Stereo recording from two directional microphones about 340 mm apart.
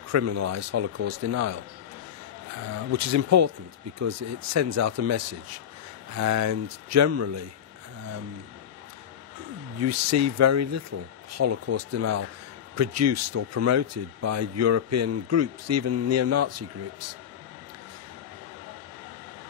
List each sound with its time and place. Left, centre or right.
0.1 s speech: right
2.7 s speech: right
9.8 s speech: right